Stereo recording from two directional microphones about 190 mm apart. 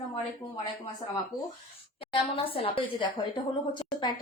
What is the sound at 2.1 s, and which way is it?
Speech, 30° left (ahead or behind).